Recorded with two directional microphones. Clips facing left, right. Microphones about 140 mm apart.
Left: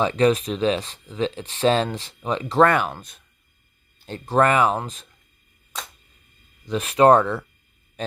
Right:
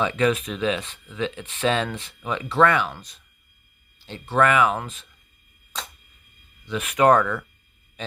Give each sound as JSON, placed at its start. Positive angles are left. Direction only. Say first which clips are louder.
{"t": 0.0, "sound": "speech", "louder": "left 3 dB", "side_deg": 35}
{"t": 6.7, "sound": "speech", "louder": "left 3 dB", "side_deg": 35}
{"t": 8.0, "sound": "a sound", "louder": "left 5 dB", "side_deg": 40}